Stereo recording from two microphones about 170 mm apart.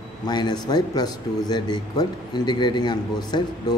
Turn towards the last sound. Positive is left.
turn(degrees=25)  # may be behind; listen again after turning